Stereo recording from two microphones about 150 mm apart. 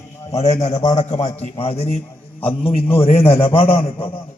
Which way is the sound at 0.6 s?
45° left (ahead or behind).